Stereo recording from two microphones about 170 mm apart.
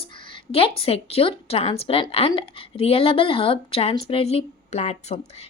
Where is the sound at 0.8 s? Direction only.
35° left (ahead or behind).